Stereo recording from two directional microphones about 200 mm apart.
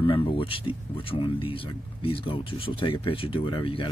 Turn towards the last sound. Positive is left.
turn(degrees=25)  # may be behind; listen again after turning